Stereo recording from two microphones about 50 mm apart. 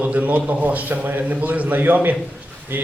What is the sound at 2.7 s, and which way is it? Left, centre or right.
Speech, right.